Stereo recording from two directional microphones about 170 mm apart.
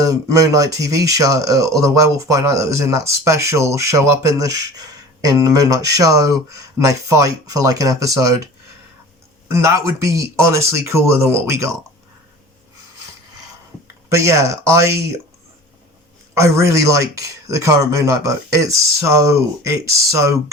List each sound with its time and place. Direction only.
0.0 s speech: 20° right (ahead or behind)
10.0 s speech: 15° right (ahead or behind)
14.1 s speech: 15° right (ahead or behind)
16.3 s speech: 15° right (ahead or behind)